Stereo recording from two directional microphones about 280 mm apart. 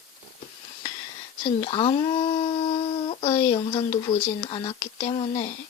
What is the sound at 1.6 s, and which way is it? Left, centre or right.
Speech, centre.